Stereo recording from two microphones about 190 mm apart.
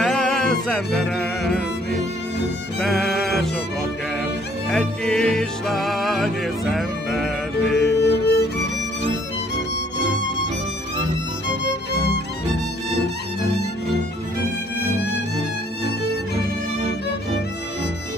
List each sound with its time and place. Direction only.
0.0 s music: centre (ahead or behind)
4.6 s music: 5° left (ahead or behind)
7.8 s music: 60° left (ahead or behind)
11.9 s music: 55° right (ahead or behind)